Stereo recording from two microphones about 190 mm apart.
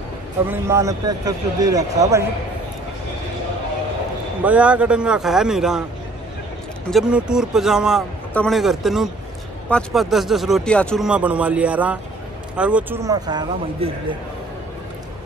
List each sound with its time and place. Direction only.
0.5 s a man's voice: 15° right (ahead or behind)
4.4 s speech: 5° right (ahead or behind)
6.9 s a man's voice: 5° right (ahead or behind); by 13.8 s 20° right (ahead or behind)